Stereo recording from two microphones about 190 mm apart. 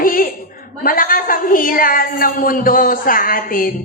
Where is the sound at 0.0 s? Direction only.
45° left (ahead or behind).